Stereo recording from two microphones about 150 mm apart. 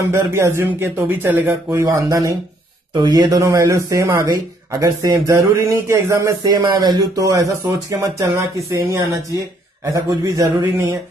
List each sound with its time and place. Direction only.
0.1 s speech: 15° right (ahead or behind)